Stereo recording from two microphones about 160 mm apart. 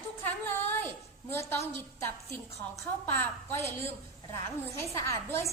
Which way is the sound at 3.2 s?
15° left (ahead or behind).